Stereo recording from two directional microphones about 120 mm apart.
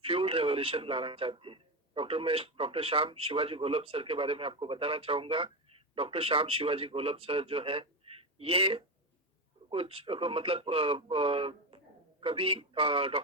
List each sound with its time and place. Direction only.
0.0 s a man's voice: 50° right (ahead or behind)
8.1 s a sound: 50° right (ahead or behind)
8.4 s a man's voice: 50° right (ahead or behind)